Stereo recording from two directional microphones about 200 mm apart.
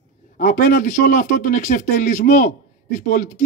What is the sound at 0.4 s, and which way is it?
Speech, 40° left (ahead or behind).